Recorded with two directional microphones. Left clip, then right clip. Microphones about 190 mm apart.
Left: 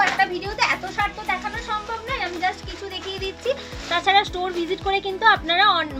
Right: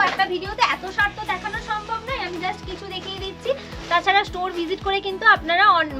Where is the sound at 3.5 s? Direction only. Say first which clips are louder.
Right 3 dB; 20° right (ahead or behind).